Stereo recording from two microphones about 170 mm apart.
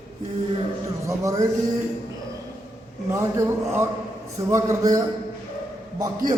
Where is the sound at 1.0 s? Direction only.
20° right (ahead or behind).